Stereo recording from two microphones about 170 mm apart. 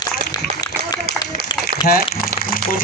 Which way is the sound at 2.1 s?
60° left (ahead or behind).